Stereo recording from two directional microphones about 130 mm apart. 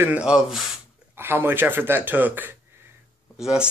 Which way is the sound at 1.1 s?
15° right (ahead or behind).